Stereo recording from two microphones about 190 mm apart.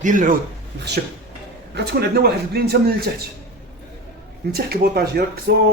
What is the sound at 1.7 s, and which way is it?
Speech, 60° right (ahead or behind).